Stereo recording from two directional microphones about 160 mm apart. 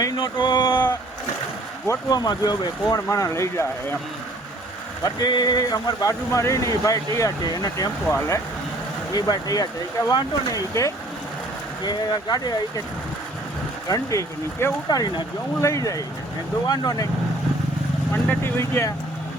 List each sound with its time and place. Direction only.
0.0 s a sound: 30° left (ahead or behind)
1.9 s speech: 25° left (ahead or behind)
5.0 s speech: 25° left (ahead or behind)
13.8 s speech: 20° left (ahead or behind)
18.1 s speech: 15° left (ahead or behind)